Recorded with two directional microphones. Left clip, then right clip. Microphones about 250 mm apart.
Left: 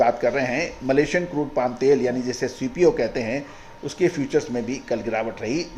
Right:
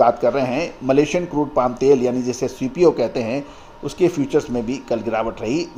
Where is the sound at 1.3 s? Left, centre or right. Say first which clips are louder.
Right 4 dB; right.